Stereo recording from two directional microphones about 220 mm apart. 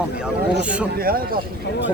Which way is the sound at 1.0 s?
40° right (ahead or behind).